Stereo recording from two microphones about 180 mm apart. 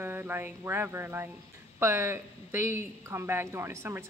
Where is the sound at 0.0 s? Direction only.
10° right (ahead or behind).